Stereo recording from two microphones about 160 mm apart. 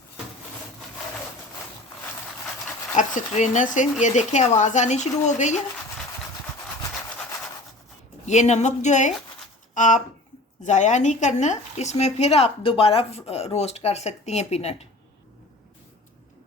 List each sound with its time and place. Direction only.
2.9 s speech: 50° left (ahead or behind)
8.3 s speech: 45° left (ahead or behind)